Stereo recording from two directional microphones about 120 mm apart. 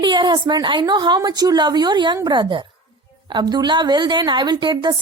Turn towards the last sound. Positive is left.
turn(degrees=-40)  # may be behind; listen again after turning